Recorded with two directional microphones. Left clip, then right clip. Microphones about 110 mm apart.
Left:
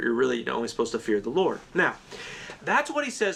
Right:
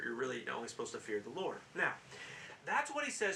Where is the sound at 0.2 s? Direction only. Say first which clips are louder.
Left 14 dB; 35° left (ahead or behind).